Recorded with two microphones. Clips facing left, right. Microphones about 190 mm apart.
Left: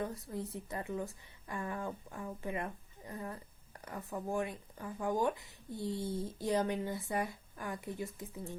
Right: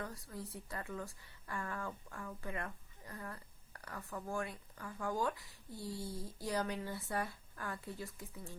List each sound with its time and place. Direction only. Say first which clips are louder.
0.0 s a woman's voice: left 6 dB; 20° left (ahead or behind)